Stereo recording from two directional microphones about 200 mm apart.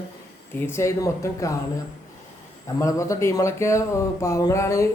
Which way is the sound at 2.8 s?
15° left (ahead or behind).